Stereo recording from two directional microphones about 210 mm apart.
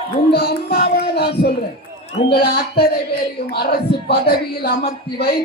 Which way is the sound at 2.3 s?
50° left (ahead or behind).